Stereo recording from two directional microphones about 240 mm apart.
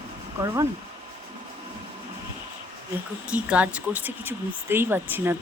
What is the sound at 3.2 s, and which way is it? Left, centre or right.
Speech, centre.